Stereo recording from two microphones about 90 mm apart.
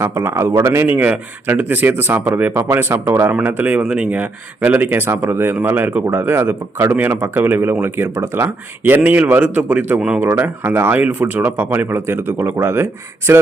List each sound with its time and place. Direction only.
0.0 s speech: 30° right (ahead or behind)